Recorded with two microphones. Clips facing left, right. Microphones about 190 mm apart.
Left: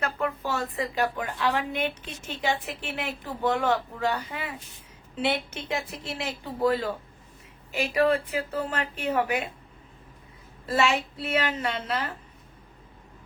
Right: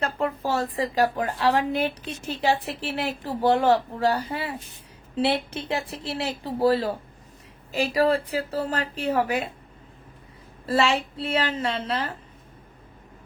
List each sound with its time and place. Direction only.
0.0 s a woman's voice: 30° right (ahead or behind)
10.7 s a woman's voice: 30° right (ahead or behind)